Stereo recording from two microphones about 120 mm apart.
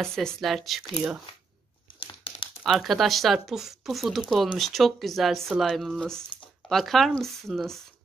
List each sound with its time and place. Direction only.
0.0 s speech: 5° left (ahead or behind)
2.0 s crumpling: 45° left (ahead or behind)
2.6 s speech: centre (ahead or behind)